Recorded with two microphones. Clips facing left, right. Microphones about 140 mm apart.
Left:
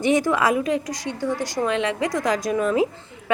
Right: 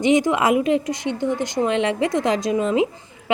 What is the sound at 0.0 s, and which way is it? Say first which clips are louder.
A woman's voice: right 2 dB; 20° right (ahead or behind).